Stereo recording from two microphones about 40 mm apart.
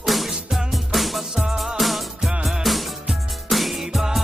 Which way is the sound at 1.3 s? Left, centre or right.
Centre.